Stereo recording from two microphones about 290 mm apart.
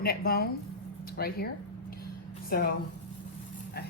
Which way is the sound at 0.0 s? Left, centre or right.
Left.